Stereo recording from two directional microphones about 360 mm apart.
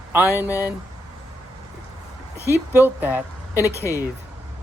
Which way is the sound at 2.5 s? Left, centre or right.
Centre.